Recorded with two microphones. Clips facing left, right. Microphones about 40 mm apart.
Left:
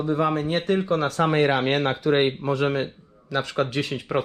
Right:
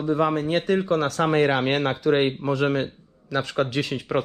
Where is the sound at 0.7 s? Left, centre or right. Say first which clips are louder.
Left 1 dB; right.